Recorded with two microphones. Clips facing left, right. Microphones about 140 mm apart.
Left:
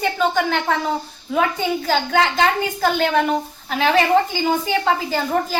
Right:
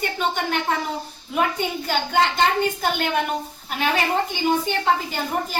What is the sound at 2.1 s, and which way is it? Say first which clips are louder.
Speech: left 1 dB; 70° left (ahead or behind).